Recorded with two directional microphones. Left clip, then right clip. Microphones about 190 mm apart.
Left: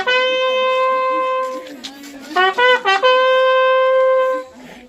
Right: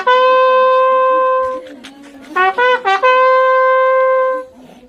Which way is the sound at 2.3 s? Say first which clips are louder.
Right 1 dB; 30° right (ahead or behind).